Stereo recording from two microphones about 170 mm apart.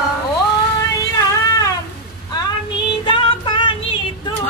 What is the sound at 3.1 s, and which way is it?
Music, 30° left (ahead or behind).